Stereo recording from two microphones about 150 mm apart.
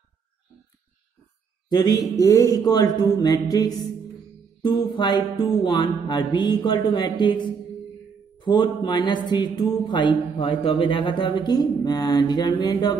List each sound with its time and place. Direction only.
1.7 s speech: 25° left (ahead or behind)
4.6 s music: 30° left (ahead or behind)
8.4 s speech: 30° left (ahead or behind)